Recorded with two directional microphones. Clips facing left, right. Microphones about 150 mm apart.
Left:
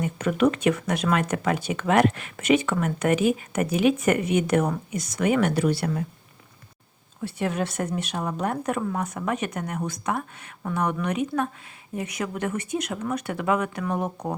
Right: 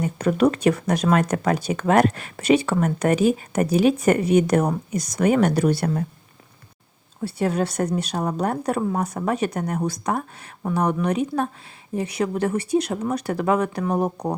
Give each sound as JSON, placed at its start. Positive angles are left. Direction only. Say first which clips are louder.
{"t": 0.0, "sound": "speech", "louder": "right 3 dB", "side_deg": -35}
{"t": 7.2, "sound": "speech", "louder": "right 4 dB", "side_deg": -35}